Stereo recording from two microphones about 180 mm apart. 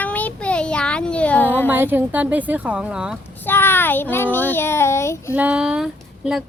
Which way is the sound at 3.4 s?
10° left (ahead or behind).